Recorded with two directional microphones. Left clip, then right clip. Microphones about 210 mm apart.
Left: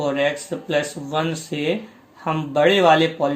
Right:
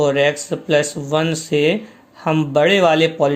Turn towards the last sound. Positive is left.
turn(degrees=-55)  # may be behind; listen again after turning